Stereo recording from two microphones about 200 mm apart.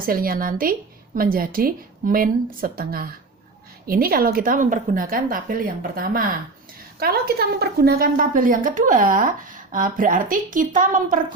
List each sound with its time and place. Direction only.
0.0 s a woman's voice: 45° right (ahead or behind)